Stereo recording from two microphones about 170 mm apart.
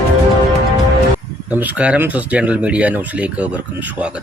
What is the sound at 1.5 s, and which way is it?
Speech, 10° right (ahead or behind).